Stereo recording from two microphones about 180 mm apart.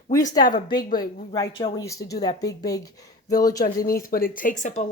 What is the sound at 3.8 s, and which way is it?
Speech, 55° left (ahead or behind).